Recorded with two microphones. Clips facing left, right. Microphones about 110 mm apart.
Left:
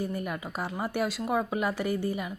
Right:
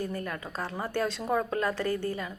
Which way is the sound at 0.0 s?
15° left (ahead or behind).